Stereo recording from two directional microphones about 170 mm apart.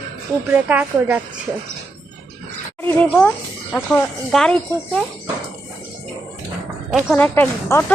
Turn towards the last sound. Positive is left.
turn(degrees=15)  # may be behind; listen again after turning